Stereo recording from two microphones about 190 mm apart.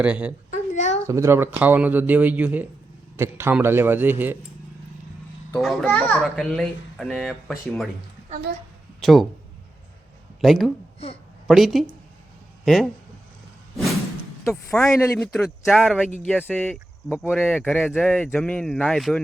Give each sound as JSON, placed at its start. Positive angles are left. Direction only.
{"t": 0.0, "sound": "speech", "side_deg": -5}
{"t": 0.5, "sound": "a sound", "side_deg": 40}
{"t": 1.0, "sound": "speech", "side_deg": -15}
{"t": 5.5, "sound": "speech", "side_deg": 0}
{"t": 9.0, "sound": "speech", "side_deg": 0}
{"t": 10.4, "sound": "speech", "side_deg": 0}
{"t": 14.5, "sound": "speech", "side_deg": 5}